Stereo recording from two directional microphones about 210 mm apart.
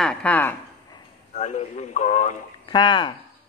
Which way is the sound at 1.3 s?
35° left (ahead or behind).